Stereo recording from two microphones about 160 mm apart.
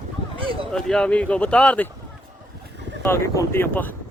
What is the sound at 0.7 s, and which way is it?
Speech, 5° left (ahead or behind).